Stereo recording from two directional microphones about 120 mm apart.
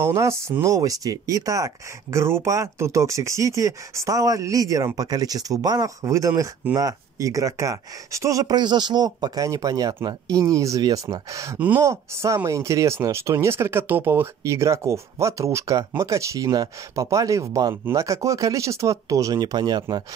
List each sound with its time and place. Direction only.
0.0 s speech: 25° right (ahead or behind)